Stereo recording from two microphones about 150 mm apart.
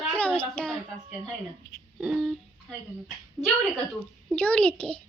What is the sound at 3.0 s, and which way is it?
A woman's voice, centre (ahead or behind).